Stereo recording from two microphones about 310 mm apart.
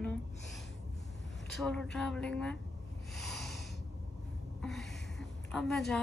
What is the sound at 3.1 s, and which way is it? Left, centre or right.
Snort, centre.